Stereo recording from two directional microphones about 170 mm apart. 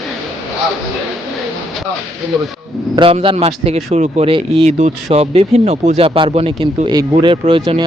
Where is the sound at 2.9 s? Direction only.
30° right (ahead or behind).